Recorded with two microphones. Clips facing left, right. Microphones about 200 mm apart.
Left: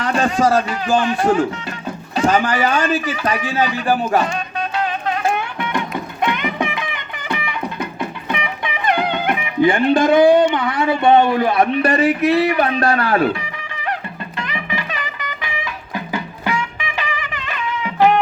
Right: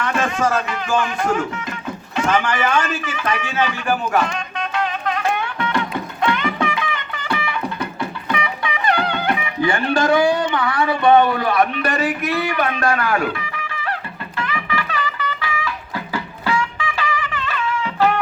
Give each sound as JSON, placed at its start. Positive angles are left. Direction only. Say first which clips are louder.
{"t": 0.0, "sound": "a man's voice", "louder": "left 3 dB", "side_deg": 35}
{"t": 4.7, "sound": "music", "louder": "even", "side_deg": 30}
{"t": 5.5, "sound": "music", "louder": "even", "side_deg": 15}
{"t": 10.3, "sound": "a man's voice", "louder": "left 5 dB", "side_deg": 20}
{"t": 14.3, "sound": "music", "louder": "right 2 dB", "side_deg": 20}